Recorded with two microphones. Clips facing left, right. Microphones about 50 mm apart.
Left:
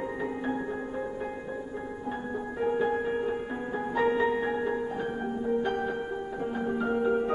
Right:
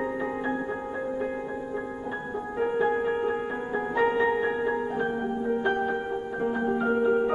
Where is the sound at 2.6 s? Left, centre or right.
Centre.